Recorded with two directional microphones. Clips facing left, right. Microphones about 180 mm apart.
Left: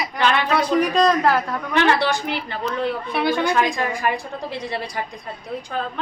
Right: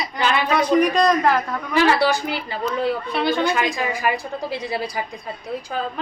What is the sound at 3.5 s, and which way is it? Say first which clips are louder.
A woman's voice: left 2 dB; 5° right (ahead or behind).